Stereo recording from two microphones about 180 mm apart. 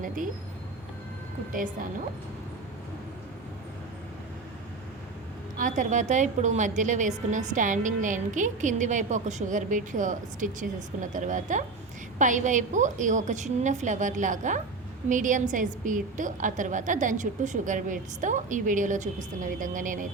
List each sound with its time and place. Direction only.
1.5 s a woman's voice: 45° right (ahead or behind)
5.5 s a woman's voice: 45° right (ahead or behind)